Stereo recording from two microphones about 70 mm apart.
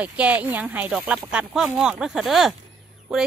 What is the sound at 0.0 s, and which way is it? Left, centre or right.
A woman's voice, right.